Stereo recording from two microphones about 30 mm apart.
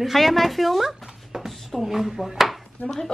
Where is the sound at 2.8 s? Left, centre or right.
Left.